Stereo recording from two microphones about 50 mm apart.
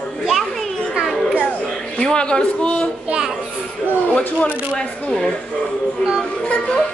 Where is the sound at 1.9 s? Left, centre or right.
Left.